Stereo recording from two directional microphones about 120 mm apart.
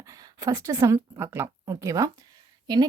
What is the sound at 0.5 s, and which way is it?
Speech, 25° right (ahead or behind).